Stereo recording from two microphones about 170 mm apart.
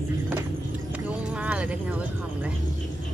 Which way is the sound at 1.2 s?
5° right (ahead or behind).